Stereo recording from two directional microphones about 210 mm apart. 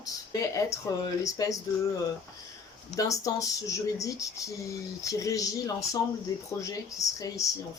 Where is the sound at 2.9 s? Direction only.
15° left (ahead or behind).